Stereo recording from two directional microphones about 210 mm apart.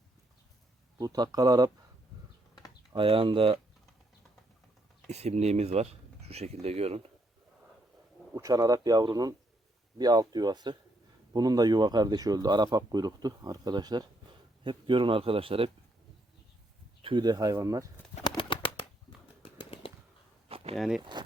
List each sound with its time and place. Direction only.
0.9 s a man's voice: 20° right (ahead or behind)
2.9 s a man's voice: 25° right (ahead or behind)
5.0 s a man's voice: 30° right (ahead or behind)
8.4 s a man's voice: 15° right (ahead or behind)
17.0 s speech: 20° right (ahead or behind)
18.2 s bird: 25° left (ahead or behind)
19.4 s a sound: 25° left (ahead or behind)
20.7 s speech: centre (ahead or behind)
21.0 s a man's voice: 20° right (ahead or behind)